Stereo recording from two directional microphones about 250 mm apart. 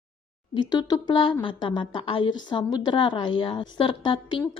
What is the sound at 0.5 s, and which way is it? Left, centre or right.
A woman's voice, centre.